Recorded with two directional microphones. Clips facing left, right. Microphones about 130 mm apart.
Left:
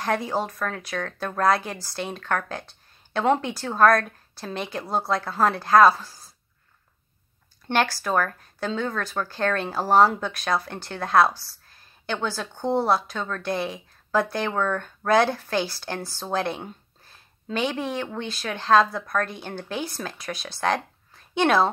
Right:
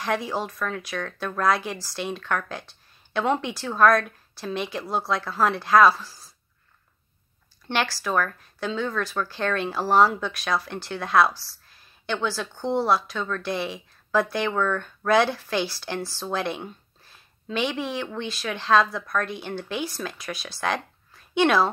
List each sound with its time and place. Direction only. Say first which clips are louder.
0.0 s speech: left 1 dB; 45° left (ahead or behind)
7.7 s speech: left 2 dB; 50° left (ahead or behind)
11.7 s a sound: right 1 dB; 45° left (ahead or behind)
12.6 s speech: left 1 dB; 45° left (ahead or behind)